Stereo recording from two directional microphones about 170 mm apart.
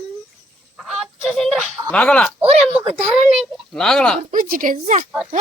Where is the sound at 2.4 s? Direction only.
35° right (ahead or behind).